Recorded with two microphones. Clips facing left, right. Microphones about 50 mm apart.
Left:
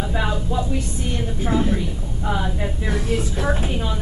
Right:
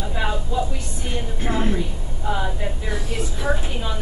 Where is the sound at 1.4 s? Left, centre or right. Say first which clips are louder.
Left 3 dB; right.